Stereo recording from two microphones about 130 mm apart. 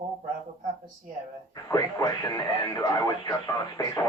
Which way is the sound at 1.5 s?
30° left (ahead or behind).